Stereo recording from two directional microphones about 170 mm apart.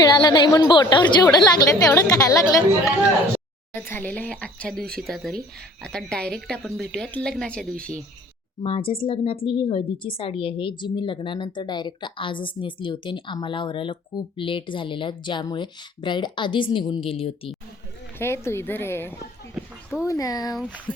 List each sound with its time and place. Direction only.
0.0 s a woman's voice: 25° left (ahead or behind); by 7.9 s 5° left (ahead or behind)
8.6 s a woman's voice: 30° left (ahead or behind)
18.2 s speech: 15° left (ahead or behind)
19.5 s a sound: 5° right (ahead or behind)
20.1 s a woman's voice: 20° left (ahead or behind)
20.6 s speech: 10° right (ahead or behind)